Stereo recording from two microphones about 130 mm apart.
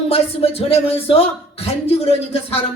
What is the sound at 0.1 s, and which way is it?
Speech, 50° left (ahead or behind).